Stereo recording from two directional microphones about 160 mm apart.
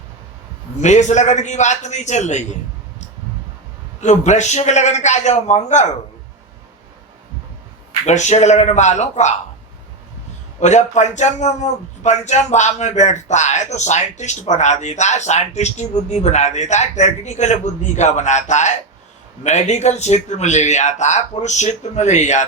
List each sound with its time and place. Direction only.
0.8 s a man's voice: 50° left (ahead or behind)
4.0 s a man's voice: 45° left (ahead or behind)
8.0 s a man's voice: 45° left (ahead or behind)
10.6 s a man's voice: 45° left (ahead or behind)